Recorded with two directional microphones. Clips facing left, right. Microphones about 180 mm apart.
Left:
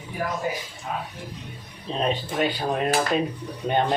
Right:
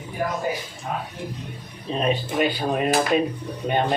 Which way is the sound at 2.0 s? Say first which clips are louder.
Right 2 dB; 5° right (ahead or behind).